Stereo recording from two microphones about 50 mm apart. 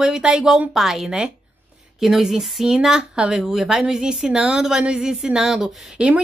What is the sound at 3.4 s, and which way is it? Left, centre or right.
Speech, centre.